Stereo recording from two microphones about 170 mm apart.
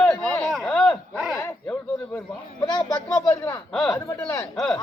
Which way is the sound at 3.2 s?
15° left (ahead or behind).